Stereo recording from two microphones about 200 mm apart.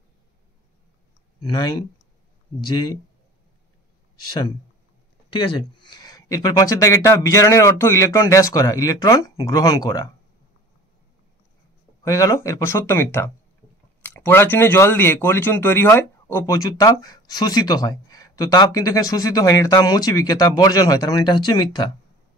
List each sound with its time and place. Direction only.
1.4 s speech: 20° left (ahead or behind)
4.3 s speech: 20° left (ahead or behind)
12.0 s speech: 15° left (ahead or behind)